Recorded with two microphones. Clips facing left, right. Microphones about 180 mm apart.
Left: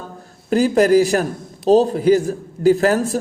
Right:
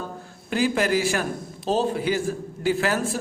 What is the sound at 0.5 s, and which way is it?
A man's voice, 40° left (ahead or behind).